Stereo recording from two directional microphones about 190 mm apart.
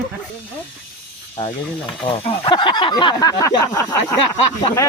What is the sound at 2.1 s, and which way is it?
Speech, 25° left (ahead or behind).